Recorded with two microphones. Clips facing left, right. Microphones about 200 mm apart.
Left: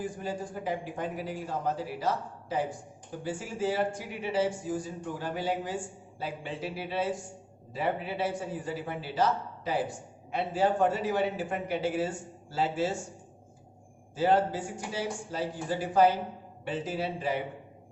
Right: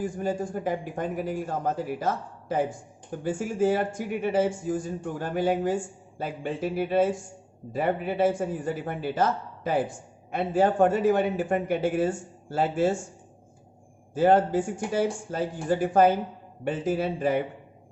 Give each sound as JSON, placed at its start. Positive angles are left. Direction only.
{"t": 0.0, "sound": "a man's voice", "side_deg": -50}
{"t": 14.1, "sound": "a man's voice", "side_deg": -50}